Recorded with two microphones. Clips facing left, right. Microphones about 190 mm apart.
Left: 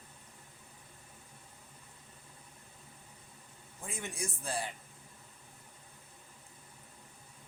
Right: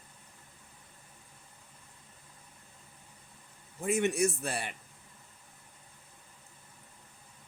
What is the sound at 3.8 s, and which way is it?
Speech, 70° right (ahead or behind).